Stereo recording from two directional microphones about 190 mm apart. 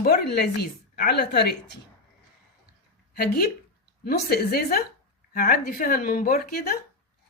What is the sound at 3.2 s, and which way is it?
Speech, 50° left (ahead or behind).